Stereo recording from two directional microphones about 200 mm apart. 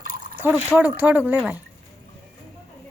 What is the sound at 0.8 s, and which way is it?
Speech, 10° right (ahead or behind).